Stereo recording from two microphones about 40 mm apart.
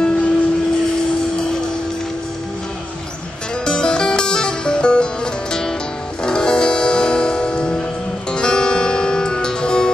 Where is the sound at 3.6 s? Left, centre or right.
Left.